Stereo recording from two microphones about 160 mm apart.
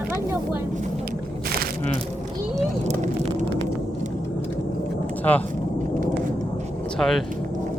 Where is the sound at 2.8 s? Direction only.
45° right (ahead or behind).